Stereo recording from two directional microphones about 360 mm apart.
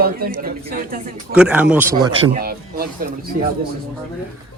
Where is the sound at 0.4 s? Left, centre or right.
Right.